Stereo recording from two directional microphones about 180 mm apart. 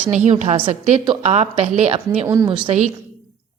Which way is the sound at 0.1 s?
40° right (ahead or behind).